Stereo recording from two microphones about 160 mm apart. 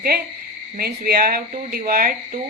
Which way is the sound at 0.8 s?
70° right (ahead or behind).